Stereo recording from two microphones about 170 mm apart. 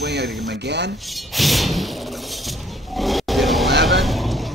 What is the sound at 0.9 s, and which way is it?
Music, centre (ahead or behind).